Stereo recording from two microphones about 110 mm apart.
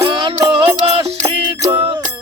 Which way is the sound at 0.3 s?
60° right (ahead or behind).